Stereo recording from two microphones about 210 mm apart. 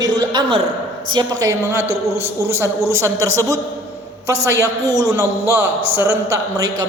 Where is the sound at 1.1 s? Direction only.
20° right (ahead or behind).